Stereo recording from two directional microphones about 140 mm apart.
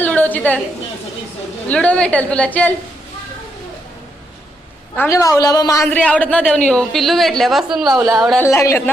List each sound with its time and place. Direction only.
0.0 s a sound: 10° left (ahead or behind)
1.6 s a woman's voice: 10° left (ahead or behind)
4.9 s a woman's voice: 20° left (ahead or behind)
5.9 s a woman's voice: 10° left (ahead or behind)
8.4 s a woman's voice: 20° left (ahead or behind)